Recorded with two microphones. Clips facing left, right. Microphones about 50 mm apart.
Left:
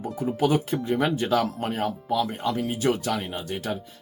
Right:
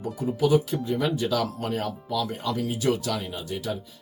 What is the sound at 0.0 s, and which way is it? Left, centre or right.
Speech, left.